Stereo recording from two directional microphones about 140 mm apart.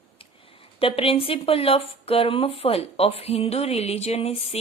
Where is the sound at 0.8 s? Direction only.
45° left (ahead or behind).